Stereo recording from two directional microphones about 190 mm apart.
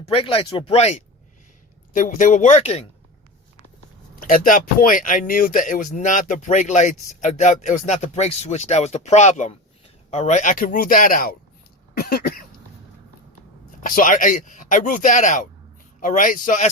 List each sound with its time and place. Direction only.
0.0 s speech: 30° left (ahead or behind)
4.1 s speech: 45° left (ahead or behind)
13.8 s speech: 45° left (ahead or behind)